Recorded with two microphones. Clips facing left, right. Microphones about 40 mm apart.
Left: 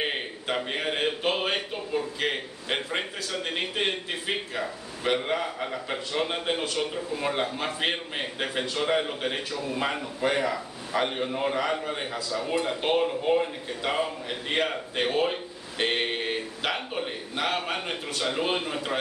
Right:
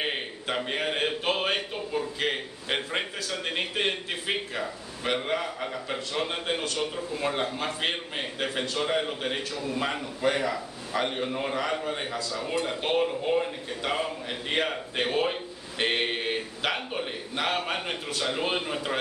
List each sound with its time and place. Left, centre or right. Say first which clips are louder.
0.0 s a sound: left 1 dB; centre
2.1 s a man's voice: even; centre
9.4 s a man's voice: left 1 dB; centre